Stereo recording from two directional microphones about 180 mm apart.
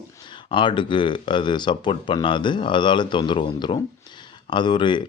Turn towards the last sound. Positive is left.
turn(degrees=25)  # may be behind; listen again after turning